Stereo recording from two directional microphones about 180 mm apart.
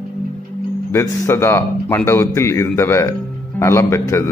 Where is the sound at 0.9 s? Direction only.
15° left (ahead or behind).